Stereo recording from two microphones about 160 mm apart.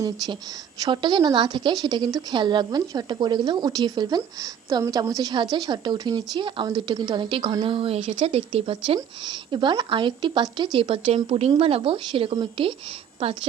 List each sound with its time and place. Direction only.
0.8 s a woman's voice: 30° right (ahead or behind)